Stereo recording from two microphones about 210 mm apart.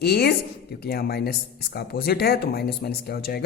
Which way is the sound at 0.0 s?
50° left (ahead or behind).